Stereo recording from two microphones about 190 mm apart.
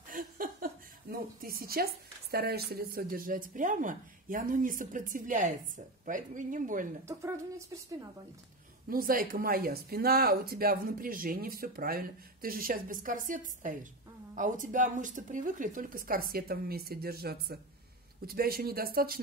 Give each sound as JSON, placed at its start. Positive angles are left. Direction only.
{"t": 0.1, "sound": "a sound", "side_deg": -45}
{"t": 1.1, "sound": "speech", "side_deg": -50}
{"t": 7.1, "sound": "a woman's voice", "side_deg": -15}
{"t": 8.9, "sound": "speech", "side_deg": -45}